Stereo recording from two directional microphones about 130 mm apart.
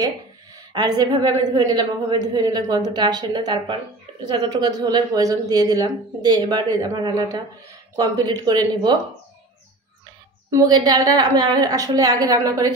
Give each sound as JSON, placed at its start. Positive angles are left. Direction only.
{"t": 0.7, "sound": "speech", "side_deg": -30}
{"t": 10.5, "sound": "a woman's voice", "side_deg": -30}